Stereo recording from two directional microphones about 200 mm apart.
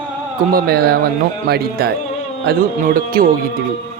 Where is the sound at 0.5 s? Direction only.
50° right (ahead or behind).